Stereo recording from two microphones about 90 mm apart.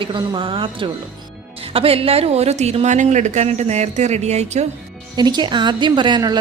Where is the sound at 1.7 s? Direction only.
90° right.